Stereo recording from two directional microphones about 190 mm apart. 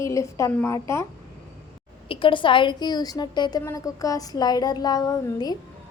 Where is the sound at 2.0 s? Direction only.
25° left (ahead or behind).